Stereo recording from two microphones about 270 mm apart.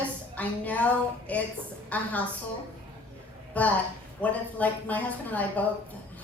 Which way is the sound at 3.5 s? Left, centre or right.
Centre.